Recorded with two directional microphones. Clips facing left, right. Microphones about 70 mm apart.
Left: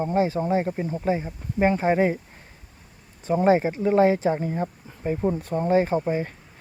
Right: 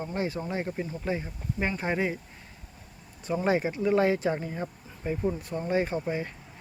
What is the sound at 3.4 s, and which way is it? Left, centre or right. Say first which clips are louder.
Speech: left 5 dB; left.